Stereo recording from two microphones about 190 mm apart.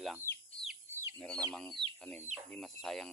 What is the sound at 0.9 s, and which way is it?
Chicken, 15° right (ahead or behind).